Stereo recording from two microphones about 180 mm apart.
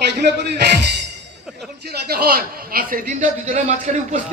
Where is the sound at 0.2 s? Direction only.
65° right (ahead or behind).